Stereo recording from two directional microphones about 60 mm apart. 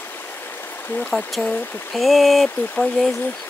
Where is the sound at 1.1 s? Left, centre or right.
Centre.